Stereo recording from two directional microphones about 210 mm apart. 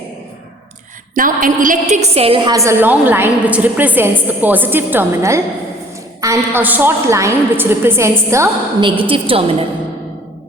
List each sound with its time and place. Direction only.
1.1 s a woman's voice: 40° right (ahead or behind); by 8.9 s 15° right (ahead or behind)
9.0 s a woman's voice: 25° right (ahead or behind)